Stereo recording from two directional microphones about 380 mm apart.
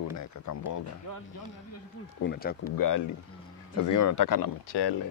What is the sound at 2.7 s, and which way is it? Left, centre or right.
Speech, left.